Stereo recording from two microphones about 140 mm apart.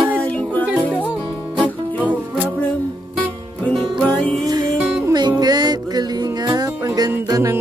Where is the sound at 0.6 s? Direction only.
10° right (ahead or behind).